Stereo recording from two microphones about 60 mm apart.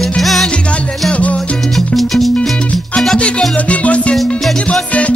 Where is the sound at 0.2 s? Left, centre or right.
Centre.